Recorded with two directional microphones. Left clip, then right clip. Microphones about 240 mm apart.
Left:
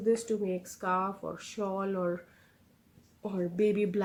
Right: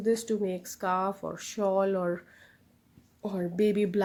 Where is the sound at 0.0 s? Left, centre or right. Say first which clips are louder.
Right 1 dB; right.